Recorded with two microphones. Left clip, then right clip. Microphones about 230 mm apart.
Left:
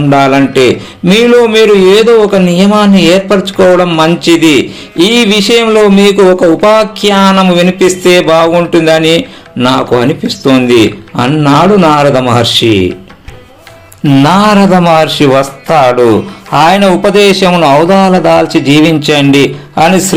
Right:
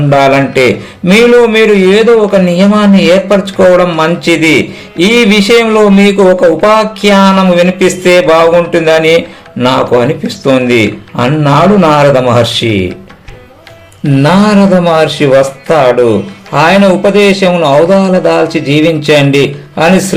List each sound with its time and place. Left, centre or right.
0.1 s a man's voice: left
14.3 s a man's voice: left